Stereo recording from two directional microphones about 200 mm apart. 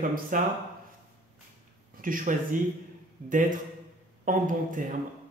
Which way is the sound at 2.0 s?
40° right (ahead or behind).